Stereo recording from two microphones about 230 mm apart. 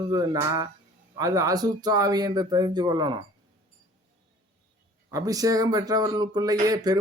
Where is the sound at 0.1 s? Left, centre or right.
Centre.